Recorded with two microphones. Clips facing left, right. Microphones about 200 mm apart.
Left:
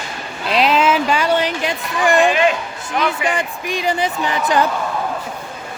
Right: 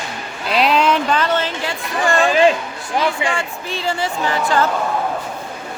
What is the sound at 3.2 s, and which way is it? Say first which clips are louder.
Speech: left 2 dB; 15° left (ahead or behind).